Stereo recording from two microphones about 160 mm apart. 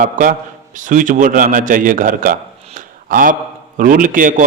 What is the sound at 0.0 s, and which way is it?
A man's voice, 55° right (ahead or behind).